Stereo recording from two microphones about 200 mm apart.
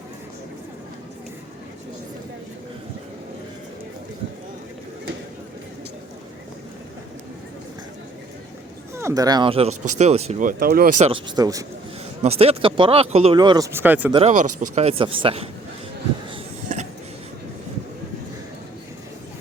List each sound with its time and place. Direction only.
9.0 s speech: 15° right (ahead or behind); by 10.5 s 30° right (ahead or behind)
10.6 s speech: 45° right (ahead or behind)
10.9 s speech: 30° right (ahead or behind)
12.2 s speech: 30° right (ahead or behind); by 14.1 s 10° right (ahead or behind)
14.1 s speech: 30° right (ahead or behind)
16.3 s a sound: 35° right (ahead or behind)